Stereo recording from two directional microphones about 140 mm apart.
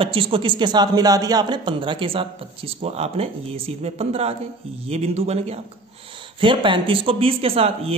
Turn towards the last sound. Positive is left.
turn(degrees=-45)  # may be behind; listen again after turning